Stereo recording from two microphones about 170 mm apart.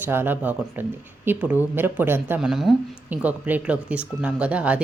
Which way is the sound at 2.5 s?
Centre (ahead or behind).